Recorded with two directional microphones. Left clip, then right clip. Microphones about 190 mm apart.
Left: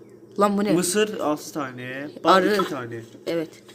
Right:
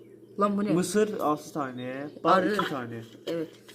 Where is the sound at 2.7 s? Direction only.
15° right (ahead or behind).